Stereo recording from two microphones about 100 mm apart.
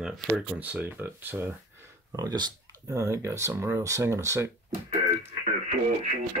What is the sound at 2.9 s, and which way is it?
Speech, 30° right (ahead or behind).